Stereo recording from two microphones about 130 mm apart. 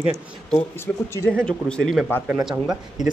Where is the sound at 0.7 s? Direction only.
20° left (ahead or behind).